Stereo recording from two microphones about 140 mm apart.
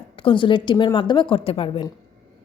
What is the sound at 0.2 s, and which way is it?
A woman's voice, 35° left (ahead or behind).